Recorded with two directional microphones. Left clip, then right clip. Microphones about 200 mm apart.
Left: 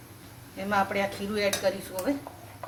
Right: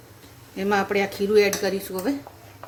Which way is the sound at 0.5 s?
55° right (ahead or behind).